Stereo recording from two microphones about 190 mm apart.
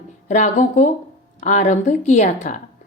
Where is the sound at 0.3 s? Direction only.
40° left (ahead or behind).